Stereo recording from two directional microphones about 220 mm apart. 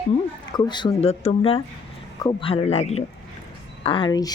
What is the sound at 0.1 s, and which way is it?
Speech, 20° left (ahead or behind).